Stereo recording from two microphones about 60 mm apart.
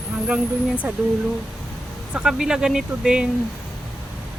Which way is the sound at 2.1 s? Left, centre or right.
Centre.